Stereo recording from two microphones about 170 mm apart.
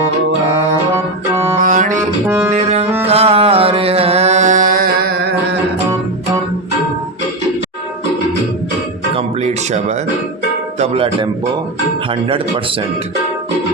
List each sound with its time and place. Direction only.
0.9 s music: 15° right (ahead or behind)
1.6 s music: 50° right (ahead or behind)
2.0 s music: 15° right (ahead or behind)
2.5 s music: 40° right (ahead or behind); by 5.3 s 65° right (ahead or behind)
9.1 s music: 40° right (ahead or behind)
10.8 s speech: 35° right (ahead or behind)